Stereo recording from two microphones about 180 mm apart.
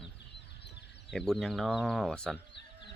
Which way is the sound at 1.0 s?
Centre (ahead or behind).